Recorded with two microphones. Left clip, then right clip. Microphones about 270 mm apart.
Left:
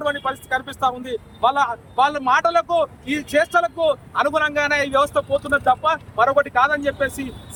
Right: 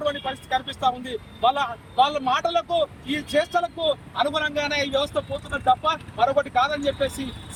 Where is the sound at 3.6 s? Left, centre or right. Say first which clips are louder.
Left 5 dB; left.